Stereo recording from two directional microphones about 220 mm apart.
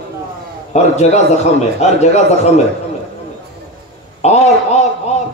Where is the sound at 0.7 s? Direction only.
30° left (ahead or behind).